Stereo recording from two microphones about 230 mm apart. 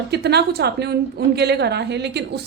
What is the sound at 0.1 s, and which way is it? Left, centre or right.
A woman's voice, right.